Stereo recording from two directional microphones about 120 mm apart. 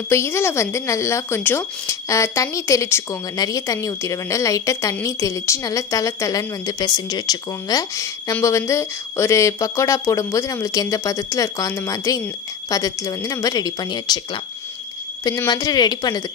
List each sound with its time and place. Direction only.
0.1 s speech: 20° left (ahead or behind)
15.5 s speech: 35° left (ahead or behind)